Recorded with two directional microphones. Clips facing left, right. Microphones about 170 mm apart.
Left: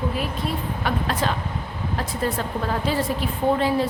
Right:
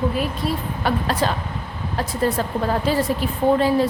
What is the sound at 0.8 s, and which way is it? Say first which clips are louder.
Speech: right 3 dB; 35° right (ahead or behind).